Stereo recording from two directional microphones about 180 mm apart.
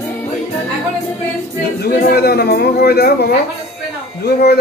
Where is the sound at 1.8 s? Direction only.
60° left (ahead or behind).